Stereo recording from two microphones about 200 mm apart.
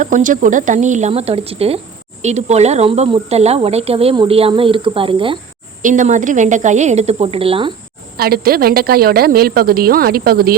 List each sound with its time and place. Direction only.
0.0 s a woman's voice: 40° right (ahead or behind); by 5.4 s 25° right (ahead or behind)
5.8 s a woman's voice: 40° right (ahead or behind)
8.1 s a woman's voice: 50° right (ahead or behind)